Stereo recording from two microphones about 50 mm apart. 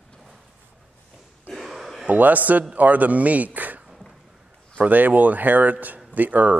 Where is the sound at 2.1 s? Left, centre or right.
Right.